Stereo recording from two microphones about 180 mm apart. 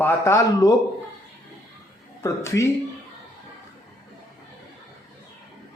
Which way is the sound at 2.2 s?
15° left (ahead or behind).